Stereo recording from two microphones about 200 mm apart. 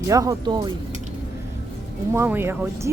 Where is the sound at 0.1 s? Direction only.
15° right (ahead or behind).